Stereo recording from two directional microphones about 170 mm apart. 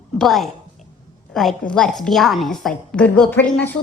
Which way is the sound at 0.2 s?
Centre (ahead or behind).